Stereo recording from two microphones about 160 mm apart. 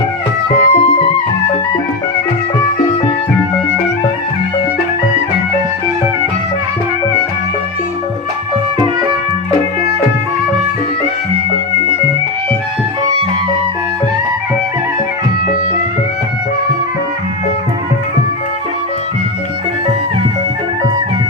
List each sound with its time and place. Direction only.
0.6 s music: 40° left (ahead or behind)